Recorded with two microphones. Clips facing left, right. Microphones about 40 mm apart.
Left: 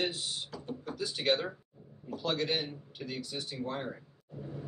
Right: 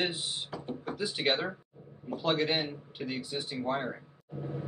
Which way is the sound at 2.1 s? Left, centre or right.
Right.